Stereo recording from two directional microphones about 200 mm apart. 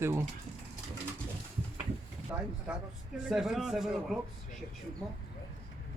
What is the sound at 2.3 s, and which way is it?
A man's voice, 5° right (ahead or behind).